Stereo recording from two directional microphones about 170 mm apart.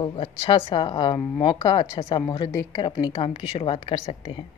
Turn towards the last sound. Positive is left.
turn(degrees=30)  # may be behind; listen again after turning